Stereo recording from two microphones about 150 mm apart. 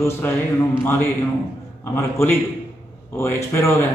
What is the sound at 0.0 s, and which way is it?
A man's voice, 15° left (ahead or behind).